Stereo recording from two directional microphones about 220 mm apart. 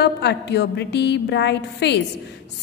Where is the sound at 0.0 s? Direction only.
50° left (ahead or behind).